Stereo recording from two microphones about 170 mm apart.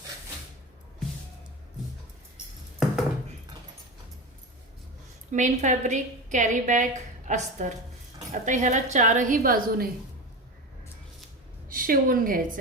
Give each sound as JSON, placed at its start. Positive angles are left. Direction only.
{"t": 5.3, "sound": "a woman's voice", "side_deg": -45}
{"t": 11.7, "sound": "a woman's voice", "side_deg": -55}